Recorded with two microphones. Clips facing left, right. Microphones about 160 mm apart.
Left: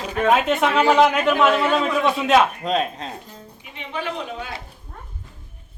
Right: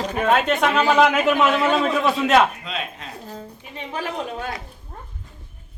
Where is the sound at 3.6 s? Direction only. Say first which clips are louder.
Left 1 dB; 40° right (ahead or behind).